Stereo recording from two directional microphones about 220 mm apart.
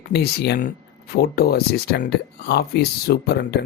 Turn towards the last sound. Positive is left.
turn(degrees=50)  # may be behind; listen again after turning